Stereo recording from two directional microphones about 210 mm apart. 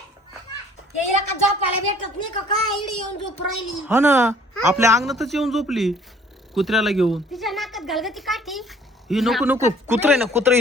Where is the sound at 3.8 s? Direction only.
10° right (ahead or behind).